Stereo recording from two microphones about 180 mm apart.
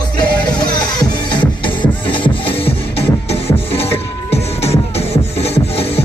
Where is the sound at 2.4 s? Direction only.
30° left (ahead or behind).